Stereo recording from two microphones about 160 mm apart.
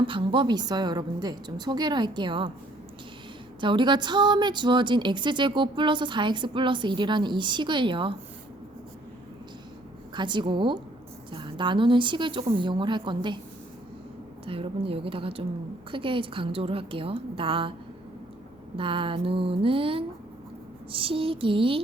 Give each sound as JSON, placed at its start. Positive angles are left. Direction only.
{"t": 0.1, "sound": "a woman's voice", "side_deg": -30}
{"t": 3.6, "sound": "a woman's voice", "side_deg": -30}
{"t": 10.2, "sound": "a woman's voice", "side_deg": -30}
{"t": 14.4, "sound": "a woman's voice", "side_deg": -35}
{"t": 18.8, "sound": "a woman's voice", "side_deg": -35}